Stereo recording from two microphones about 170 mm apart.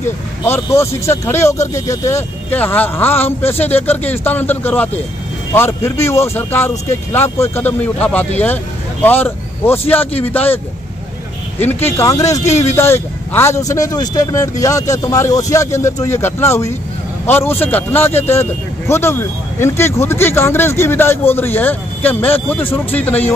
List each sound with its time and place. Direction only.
0.5 s speech: 15° left (ahead or behind)
11.6 s speech: 15° left (ahead or behind)